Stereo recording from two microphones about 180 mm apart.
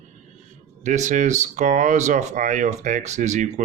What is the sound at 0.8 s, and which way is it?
Speech, 40° right (ahead or behind).